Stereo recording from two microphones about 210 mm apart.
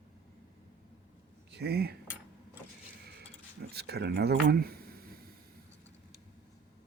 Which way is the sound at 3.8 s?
50° right (ahead or behind).